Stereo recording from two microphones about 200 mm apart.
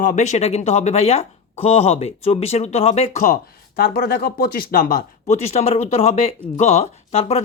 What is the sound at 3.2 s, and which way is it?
Speech, 45° left (ahead or behind).